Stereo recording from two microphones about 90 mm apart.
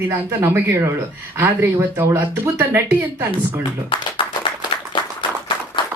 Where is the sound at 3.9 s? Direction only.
70° left (ahead or behind).